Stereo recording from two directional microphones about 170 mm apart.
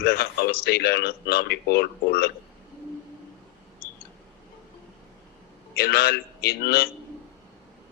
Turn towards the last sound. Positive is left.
turn(degrees=70)  # may be behind; listen again after turning